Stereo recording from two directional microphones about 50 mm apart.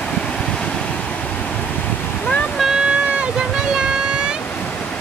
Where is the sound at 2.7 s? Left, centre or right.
Right.